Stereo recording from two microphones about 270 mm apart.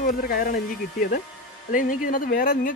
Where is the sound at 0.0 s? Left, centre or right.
Left.